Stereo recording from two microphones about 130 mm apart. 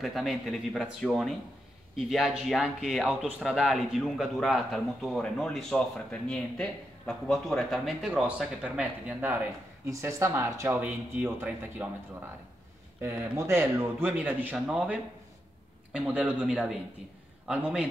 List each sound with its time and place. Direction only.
0.0 s speech: centre (ahead or behind)
13.0 s speech: 20° right (ahead or behind)